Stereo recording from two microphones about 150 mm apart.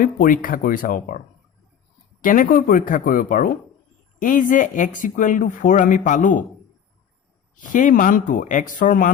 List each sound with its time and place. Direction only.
0.0 s speech: 65° left (ahead or behind)
2.2 s speech: 65° left (ahead or behind)
7.6 s speech: 60° left (ahead or behind)